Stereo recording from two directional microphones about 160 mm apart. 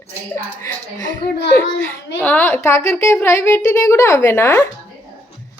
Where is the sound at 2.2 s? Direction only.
10° left (ahead or behind).